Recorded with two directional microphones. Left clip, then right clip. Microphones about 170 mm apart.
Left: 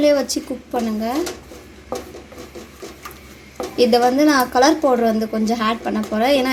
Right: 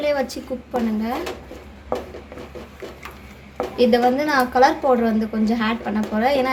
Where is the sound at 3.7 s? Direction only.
45° left (ahead or behind).